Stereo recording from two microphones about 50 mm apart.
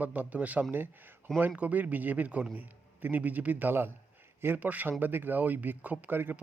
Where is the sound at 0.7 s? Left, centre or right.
Right.